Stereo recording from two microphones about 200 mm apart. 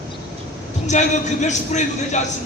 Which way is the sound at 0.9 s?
35° left (ahead or behind).